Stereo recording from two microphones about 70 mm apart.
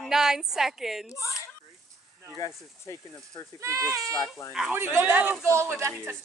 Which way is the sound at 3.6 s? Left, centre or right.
Right.